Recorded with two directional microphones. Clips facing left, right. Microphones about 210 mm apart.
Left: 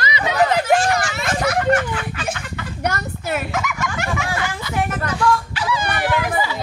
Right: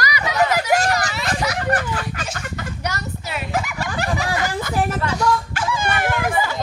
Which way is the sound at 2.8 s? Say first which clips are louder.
Left 8 dB; 55° left (ahead or behind).